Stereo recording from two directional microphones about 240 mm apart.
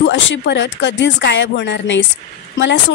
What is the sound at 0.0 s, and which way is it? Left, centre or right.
A woman's voice, left.